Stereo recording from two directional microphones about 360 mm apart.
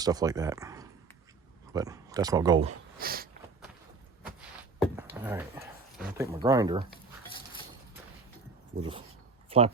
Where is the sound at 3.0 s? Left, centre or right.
Right.